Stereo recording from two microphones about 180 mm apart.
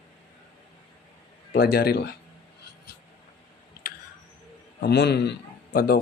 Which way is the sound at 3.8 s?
55° left (ahead or behind).